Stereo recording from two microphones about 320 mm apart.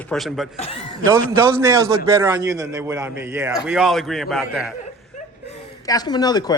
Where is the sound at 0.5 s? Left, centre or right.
Centre.